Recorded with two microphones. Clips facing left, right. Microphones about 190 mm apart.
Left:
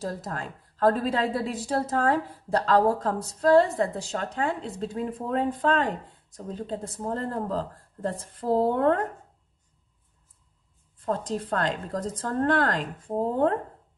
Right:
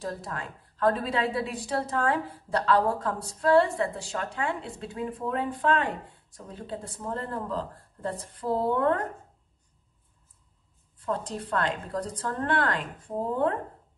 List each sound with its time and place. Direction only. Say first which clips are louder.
0.0 s a woman's voice: left 2 dB; 40° left (ahead or behind)
11.1 s a woman's voice: left 3 dB; 40° left (ahead or behind)